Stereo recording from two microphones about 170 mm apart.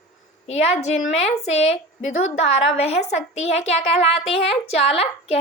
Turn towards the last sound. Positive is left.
turn(degrees=35)  # may be behind; listen again after turning